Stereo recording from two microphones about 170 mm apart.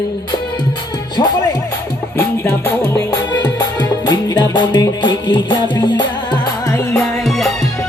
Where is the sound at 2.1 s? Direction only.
10° left (ahead or behind).